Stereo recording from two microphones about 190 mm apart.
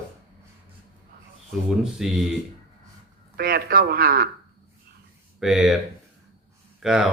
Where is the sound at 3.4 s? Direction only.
50° right (ahead or behind).